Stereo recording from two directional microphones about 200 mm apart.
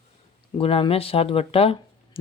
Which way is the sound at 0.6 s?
30° left (ahead or behind).